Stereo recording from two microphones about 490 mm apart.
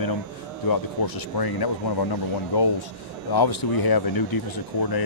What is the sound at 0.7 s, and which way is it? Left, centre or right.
Speech, left.